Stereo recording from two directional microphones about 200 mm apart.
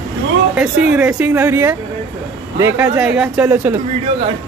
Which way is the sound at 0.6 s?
5° right (ahead or behind).